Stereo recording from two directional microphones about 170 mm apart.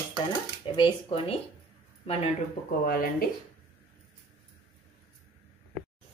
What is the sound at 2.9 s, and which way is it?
Speech, 60° left (ahead or behind).